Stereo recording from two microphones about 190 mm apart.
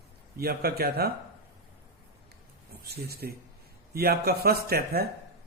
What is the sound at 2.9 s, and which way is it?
A man's voice, 55° right (ahead or behind).